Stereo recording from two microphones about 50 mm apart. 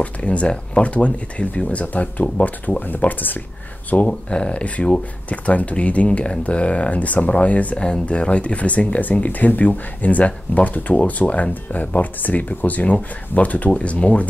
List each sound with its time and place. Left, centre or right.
0.0 s speech: left
4.1 s speech: left